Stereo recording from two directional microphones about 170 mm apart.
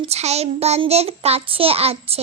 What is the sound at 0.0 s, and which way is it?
Child singing, 40° right (ahead or behind).